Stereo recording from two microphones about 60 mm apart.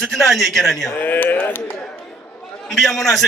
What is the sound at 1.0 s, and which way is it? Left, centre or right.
Speech, left.